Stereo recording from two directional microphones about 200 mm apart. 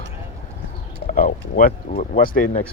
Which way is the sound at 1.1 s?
45° left (ahead or behind).